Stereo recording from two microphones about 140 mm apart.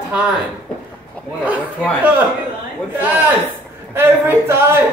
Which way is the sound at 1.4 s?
10° right (ahead or behind).